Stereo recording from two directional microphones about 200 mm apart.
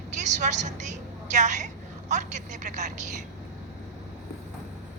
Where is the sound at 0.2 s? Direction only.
35° right (ahead or behind).